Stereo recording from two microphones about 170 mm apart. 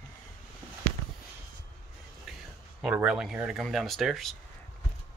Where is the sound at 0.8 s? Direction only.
35° right (ahead or behind).